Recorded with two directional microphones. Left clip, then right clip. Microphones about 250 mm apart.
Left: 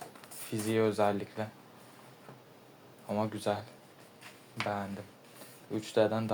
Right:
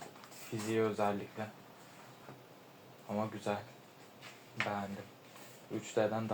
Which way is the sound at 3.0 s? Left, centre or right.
Left.